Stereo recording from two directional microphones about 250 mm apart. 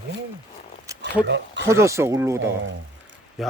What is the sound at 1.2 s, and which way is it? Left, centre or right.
Speech, right.